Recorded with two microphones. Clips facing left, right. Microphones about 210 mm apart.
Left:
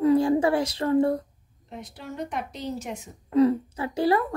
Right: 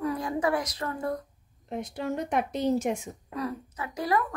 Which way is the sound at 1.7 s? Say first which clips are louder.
Right 7 dB; 50° right (ahead or behind).